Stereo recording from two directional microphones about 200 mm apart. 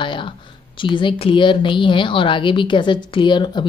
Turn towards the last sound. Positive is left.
turn(degrees=25)  # may be behind; listen again after turning